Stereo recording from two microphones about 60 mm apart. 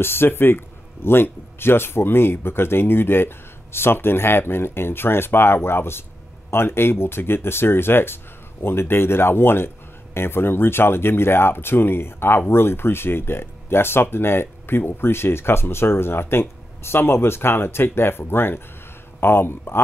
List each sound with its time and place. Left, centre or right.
0.0 s speech: left